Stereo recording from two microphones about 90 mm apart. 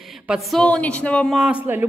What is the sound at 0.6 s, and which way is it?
Speech, 15° left (ahead or behind).